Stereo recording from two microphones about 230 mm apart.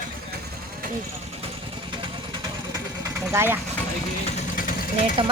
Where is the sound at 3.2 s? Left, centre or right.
Centre.